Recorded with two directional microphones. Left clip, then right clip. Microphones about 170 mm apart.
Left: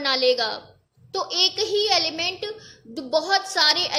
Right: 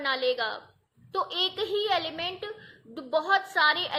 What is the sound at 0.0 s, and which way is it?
A woman's voice, 25° left (ahead or behind).